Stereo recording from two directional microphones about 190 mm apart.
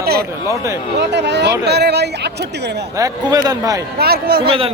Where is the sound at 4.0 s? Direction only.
55° right (ahead or behind).